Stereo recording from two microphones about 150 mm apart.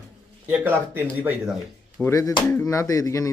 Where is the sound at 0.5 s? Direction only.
15° right (ahead or behind).